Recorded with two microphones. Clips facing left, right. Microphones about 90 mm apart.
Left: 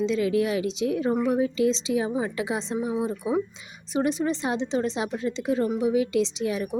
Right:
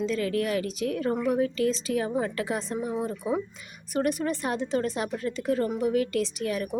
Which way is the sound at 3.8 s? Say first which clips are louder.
Left 2 dB; 20° left (ahead or behind).